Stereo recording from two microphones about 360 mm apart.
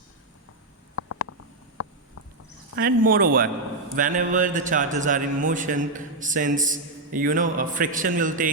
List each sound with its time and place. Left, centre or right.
0.9 s stomach rumble: left
2.7 s a man's voice: right